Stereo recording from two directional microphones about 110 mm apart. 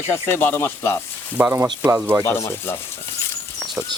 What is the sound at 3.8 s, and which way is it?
Speech, 20° right (ahead or behind).